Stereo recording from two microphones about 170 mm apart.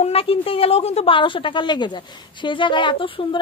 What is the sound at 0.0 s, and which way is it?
A woman's voice, 35° left (ahead or behind).